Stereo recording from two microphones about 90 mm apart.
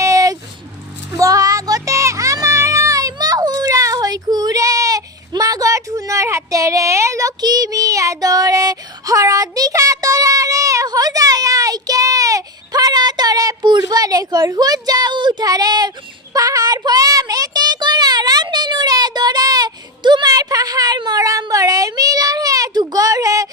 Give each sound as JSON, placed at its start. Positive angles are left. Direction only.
{"t": 0.0, "sound": "a sound", "side_deg": -40}
{"t": 1.2, "sound": "music", "side_deg": -40}
{"t": 16.3, "sound": "child singing", "side_deg": -40}